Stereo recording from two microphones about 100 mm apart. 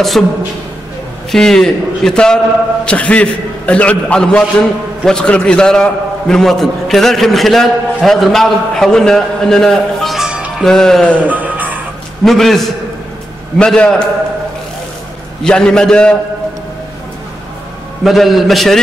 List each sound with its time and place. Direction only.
0.2 s a man's voice: 5° left (ahead or behind)
10.6 s a man's voice: 5° left (ahead or behind)
11.2 s music: 15° right (ahead or behind)
12.3 s a man's voice: centre (ahead or behind)
15.4 s a man's voice: 10° left (ahead or behind)
18.0 s a man's voice: centre (ahead or behind)